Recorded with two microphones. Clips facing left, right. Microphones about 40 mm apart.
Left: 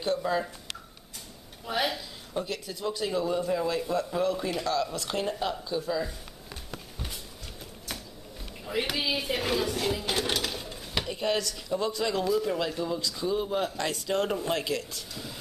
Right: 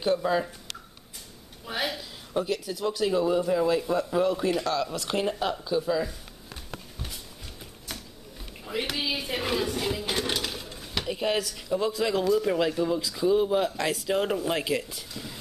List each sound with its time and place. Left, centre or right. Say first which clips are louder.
0.0 s a man's voice: right 3 dB; centre
1.7 s a sound: left 2 dB; centre
2.3 s a man's voice: right 5 dB; centre
8.6 s a man's voice: even; centre